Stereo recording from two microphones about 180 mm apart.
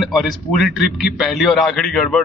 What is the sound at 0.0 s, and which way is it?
A man's voice, centre (ahead or behind).